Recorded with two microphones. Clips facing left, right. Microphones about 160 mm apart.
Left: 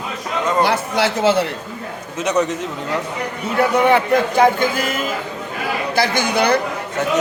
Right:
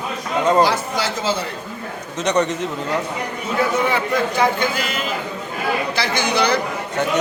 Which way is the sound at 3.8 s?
55° left (ahead or behind).